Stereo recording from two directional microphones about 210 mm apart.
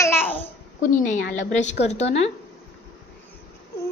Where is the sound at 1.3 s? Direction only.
35° left (ahead or behind).